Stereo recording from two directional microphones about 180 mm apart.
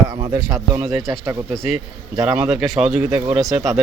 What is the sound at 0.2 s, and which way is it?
Speech, 25° right (ahead or behind).